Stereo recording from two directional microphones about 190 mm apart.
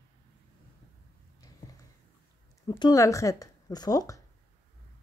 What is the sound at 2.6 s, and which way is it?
Speech, 20° left (ahead or behind).